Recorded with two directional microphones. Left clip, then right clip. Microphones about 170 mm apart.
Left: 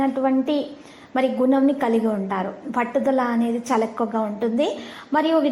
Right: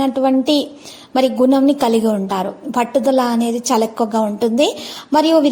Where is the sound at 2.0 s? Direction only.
30° right (ahead or behind).